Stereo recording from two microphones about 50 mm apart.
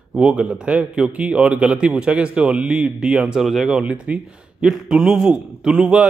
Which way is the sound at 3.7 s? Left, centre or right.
Centre.